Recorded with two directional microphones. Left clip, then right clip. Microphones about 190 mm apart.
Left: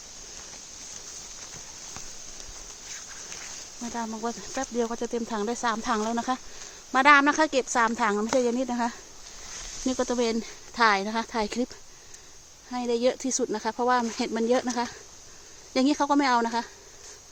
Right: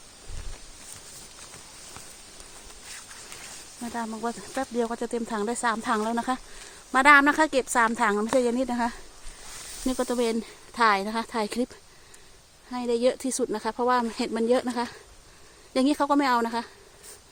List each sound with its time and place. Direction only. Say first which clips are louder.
3.9 s speech: right 1 dB; 25° right (ahead or behind)
12.7 s speech: right 1 dB; 15° right (ahead or behind)